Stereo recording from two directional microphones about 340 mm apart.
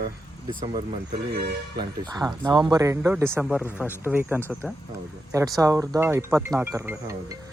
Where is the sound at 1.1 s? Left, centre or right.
Right.